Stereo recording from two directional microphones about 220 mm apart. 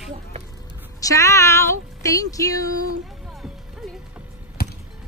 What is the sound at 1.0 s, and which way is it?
Speech, 15° left (ahead or behind).